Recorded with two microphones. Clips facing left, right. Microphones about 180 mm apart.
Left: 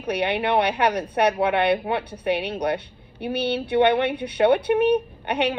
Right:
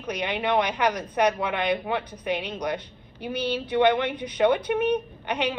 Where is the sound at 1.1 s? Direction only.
65° left (ahead or behind).